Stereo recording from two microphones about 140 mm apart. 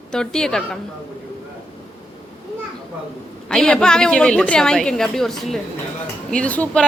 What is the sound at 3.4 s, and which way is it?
A woman's voice, 5° left (ahead or behind).